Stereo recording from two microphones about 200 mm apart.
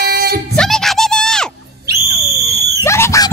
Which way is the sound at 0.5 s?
Centre (ahead or behind).